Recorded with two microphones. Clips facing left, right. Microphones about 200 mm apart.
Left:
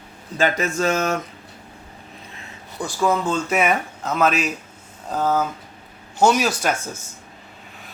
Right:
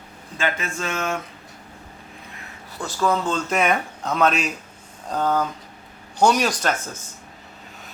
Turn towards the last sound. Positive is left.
turn(degrees=10)  # may be behind; listen again after turning